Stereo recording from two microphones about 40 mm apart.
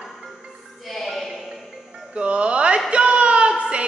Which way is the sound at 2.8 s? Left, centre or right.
Right.